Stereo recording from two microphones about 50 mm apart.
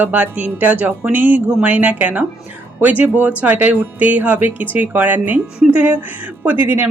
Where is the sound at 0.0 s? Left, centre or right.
Right.